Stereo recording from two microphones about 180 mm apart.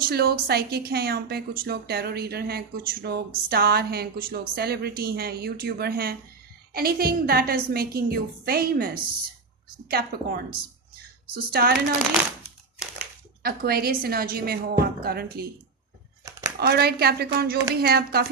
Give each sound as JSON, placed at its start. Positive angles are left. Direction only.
{"t": 0.0, "sound": "a woman's voice", "side_deg": -60}
{"t": 9.9, "sound": "a woman's voice", "side_deg": -55}
{"t": 13.4, "sound": "a woman's voice", "side_deg": -60}
{"t": 16.6, "sound": "a woman's voice", "side_deg": -60}